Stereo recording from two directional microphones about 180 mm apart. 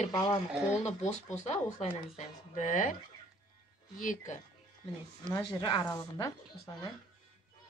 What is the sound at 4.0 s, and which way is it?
Speech, 45° left (ahead or behind).